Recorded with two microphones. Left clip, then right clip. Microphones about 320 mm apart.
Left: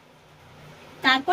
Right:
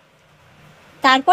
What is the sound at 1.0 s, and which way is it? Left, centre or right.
Speech, centre.